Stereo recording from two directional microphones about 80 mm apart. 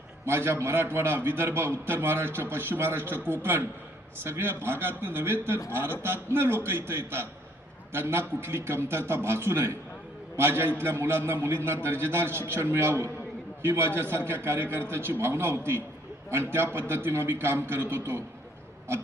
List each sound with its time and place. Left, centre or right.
0.3 s a man's voice: right